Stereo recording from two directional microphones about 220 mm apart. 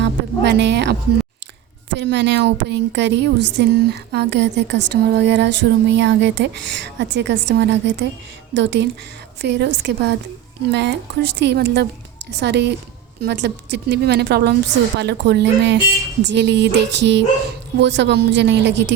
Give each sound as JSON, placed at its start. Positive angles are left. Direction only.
{"t": 0.0, "sound": "a woman's voice", "side_deg": -50}